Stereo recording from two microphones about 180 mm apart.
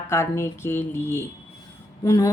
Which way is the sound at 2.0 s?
20° left (ahead or behind).